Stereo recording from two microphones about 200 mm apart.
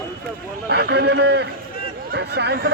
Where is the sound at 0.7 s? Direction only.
55° right (ahead or behind).